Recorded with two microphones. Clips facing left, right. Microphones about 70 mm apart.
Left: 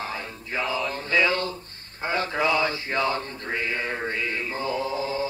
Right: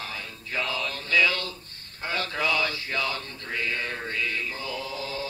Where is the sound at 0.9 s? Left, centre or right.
Left.